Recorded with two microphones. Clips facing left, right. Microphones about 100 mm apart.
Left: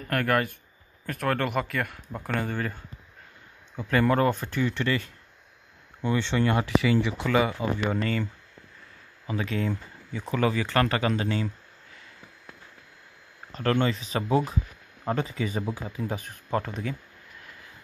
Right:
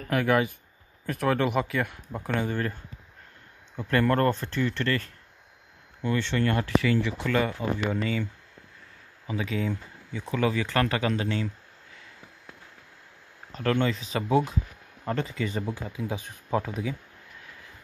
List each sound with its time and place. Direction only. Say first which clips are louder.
0.1 s speech: right 2 dB; 5° right (ahead or behind)
9.3 s speech: left 1 dB; 5° right (ahead or behind)
13.5 s speech: left 1 dB; centre (ahead or behind)